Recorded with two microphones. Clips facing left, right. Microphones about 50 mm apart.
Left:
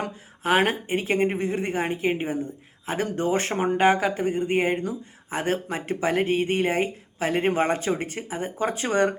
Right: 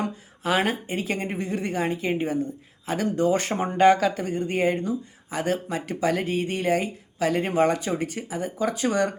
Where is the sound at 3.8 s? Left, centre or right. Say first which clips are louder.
Right 4 dB; left.